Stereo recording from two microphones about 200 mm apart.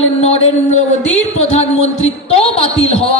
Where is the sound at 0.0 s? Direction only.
30° left (ahead or behind).